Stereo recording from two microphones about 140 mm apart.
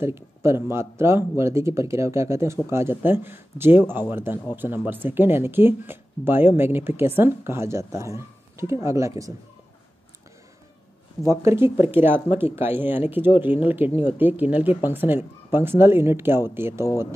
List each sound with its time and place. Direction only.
0.0 s speech: 20° right (ahead or behind)
11.2 s speech: 20° right (ahead or behind)